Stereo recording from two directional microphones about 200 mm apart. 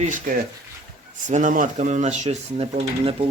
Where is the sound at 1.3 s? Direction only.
40° right (ahead or behind).